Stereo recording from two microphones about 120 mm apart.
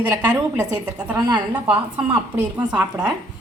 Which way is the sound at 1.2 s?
40° right (ahead or behind).